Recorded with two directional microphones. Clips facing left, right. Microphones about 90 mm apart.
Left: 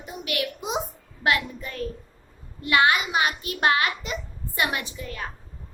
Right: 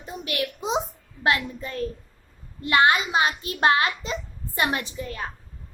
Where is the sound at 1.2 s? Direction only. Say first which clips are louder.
Even; 30° right (ahead or behind).